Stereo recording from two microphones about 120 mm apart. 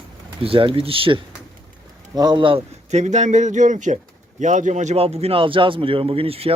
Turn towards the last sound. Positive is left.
turn(degrees=-55)  # may be behind; listen again after turning